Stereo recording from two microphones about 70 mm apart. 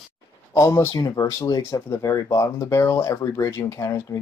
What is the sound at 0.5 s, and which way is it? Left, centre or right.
Speech, left.